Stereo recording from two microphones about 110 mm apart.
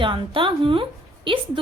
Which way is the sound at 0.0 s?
50° right (ahead or behind).